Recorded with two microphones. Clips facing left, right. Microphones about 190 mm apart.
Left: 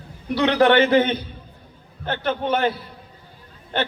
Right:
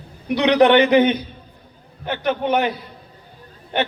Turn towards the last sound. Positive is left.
turn(degrees=-15)  # may be behind; listen again after turning